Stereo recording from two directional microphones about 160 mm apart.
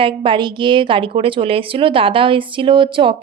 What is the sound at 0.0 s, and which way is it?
A woman's voice, 30° right (ahead or behind).